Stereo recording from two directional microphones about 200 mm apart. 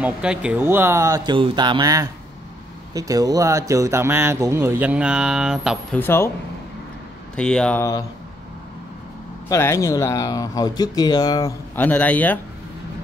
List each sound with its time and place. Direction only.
0.0 s a man's voice: 5° right (ahead or behind)
5.9 s speech: 10° left (ahead or behind)
7.3 s speech: 5° left (ahead or behind)
9.5 s speech: 15° left (ahead or behind)